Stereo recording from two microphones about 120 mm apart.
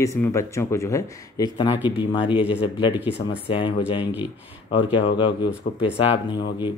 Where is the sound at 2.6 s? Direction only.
40° left (ahead or behind).